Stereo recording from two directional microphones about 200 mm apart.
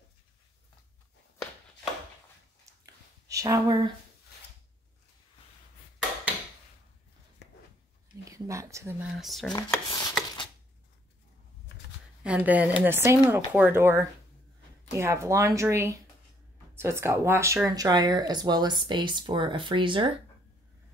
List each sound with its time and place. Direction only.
3.3 s speech: 15° right (ahead or behind)
8.3 s speech: 15° right (ahead or behind)
9.2 s speech: centre (ahead or behind)
9.5 s speech: 20° left (ahead or behind)
12.2 s speech: 5° right (ahead or behind); by 20.1 s 25° right (ahead or behind)